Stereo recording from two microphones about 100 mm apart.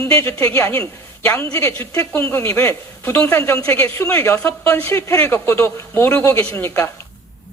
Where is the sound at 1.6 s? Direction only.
30° left (ahead or behind); by 3.4 s 15° left (ahead or behind).